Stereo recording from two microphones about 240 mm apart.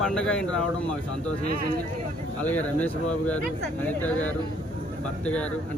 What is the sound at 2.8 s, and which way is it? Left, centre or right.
Speech, centre.